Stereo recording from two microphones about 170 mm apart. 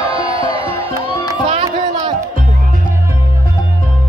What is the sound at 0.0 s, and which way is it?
Music, 30° right (ahead or behind).